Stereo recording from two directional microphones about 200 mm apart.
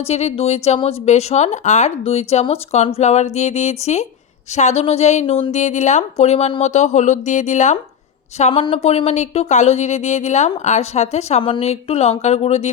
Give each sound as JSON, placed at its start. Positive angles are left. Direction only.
{"t": 0.0, "sound": "speech", "side_deg": 30}